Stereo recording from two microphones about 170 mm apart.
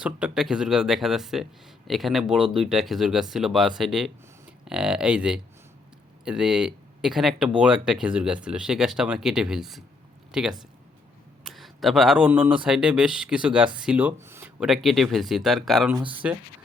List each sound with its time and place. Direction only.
0.0 s speech: 5° right (ahead or behind)
14.6 s speech: centre (ahead or behind)